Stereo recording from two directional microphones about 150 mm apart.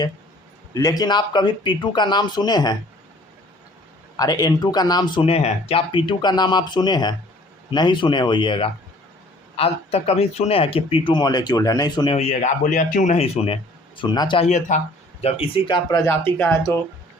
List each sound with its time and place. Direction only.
0.7 s speech: 25° left (ahead or behind)
4.2 s speech: 25° left (ahead or behind)
5.2 s speech: 40° left (ahead or behind)
12.1 s speech: 50° left (ahead or behind)
14.0 s speech: 30° left (ahead or behind)
14.4 s speech: 55° left (ahead or behind)
15.2 s speech: 40° left (ahead or behind)
16.4 s speech: 20° left (ahead or behind)